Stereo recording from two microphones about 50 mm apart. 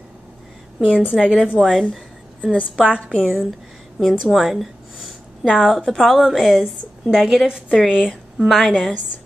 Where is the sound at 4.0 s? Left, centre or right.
Centre.